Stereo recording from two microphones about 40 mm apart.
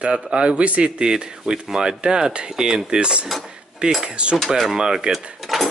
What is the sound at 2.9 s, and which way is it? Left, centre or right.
A man's voice, right.